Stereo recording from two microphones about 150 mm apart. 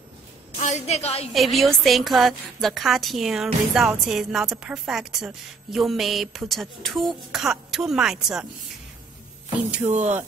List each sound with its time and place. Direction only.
0.6 s a woman's voice: 50° left (ahead or behind)
1.3 s a woman's voice: centre (ahead or behind)
9.9 s speech: 50° right (ahead or behind)